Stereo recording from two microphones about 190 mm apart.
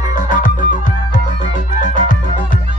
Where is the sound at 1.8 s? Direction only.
45° left (ahead or behind).